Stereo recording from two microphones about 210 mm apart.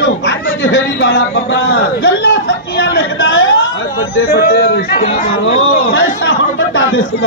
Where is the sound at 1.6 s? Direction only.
50° left (ahead or behind).